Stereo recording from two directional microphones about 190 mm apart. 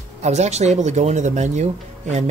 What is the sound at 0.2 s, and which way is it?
Speech, 35° right (ahead or behind).